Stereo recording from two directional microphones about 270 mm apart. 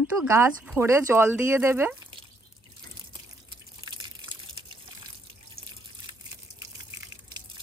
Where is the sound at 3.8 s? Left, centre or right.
Centre.